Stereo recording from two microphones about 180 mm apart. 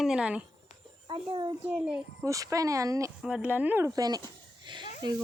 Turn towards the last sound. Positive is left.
turn(degrees=-25)  # may be behind; listen again after turning